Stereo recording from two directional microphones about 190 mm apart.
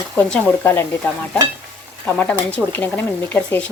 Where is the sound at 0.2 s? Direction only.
5° left (ahead or behind).